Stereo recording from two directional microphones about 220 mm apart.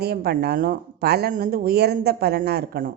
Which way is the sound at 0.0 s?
45° right (ahead or behind).